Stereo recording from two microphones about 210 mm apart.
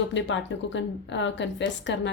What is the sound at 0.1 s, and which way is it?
Speech, 60° left (ahead or behind).